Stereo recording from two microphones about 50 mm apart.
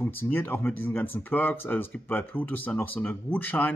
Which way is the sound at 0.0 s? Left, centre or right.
Left.